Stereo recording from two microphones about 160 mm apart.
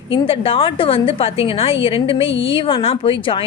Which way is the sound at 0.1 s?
35° left (ahead or behind).